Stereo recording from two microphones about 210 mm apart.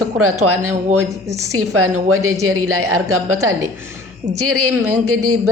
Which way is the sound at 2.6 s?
90° right.